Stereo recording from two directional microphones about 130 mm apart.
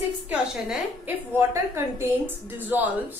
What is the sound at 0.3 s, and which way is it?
Speech, 10° right (ahead or behind).